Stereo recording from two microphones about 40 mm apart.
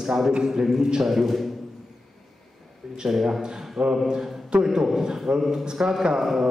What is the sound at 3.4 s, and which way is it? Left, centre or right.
A man's voice, right.